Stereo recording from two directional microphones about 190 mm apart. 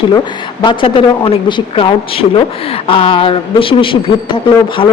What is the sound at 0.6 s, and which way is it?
A woman's voice, 25° left (ahead or behind).